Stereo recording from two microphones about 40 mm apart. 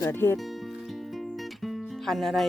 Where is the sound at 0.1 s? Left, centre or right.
Left.